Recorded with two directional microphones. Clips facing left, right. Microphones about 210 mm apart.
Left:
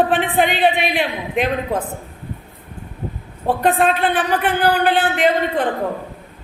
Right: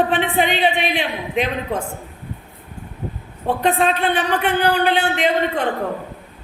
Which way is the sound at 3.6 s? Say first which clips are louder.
Left 1 dB; 5° left (ahead or behind).